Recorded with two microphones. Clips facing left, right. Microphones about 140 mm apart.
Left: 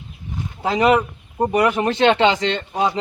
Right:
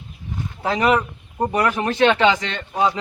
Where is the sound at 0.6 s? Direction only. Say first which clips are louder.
Left 2 dB; 20° left (ahead or behind).